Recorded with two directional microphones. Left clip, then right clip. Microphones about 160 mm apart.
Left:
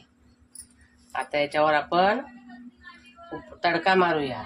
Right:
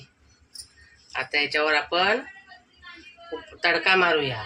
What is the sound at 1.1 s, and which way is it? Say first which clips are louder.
Speech: right 1 dB; 80° left.